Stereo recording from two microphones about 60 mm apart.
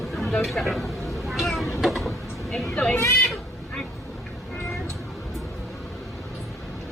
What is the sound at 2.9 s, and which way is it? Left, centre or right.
Speech, left.